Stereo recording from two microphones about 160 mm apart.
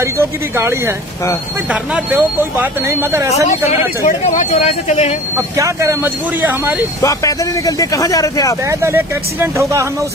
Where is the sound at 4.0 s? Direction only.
55° left (ahead or behind).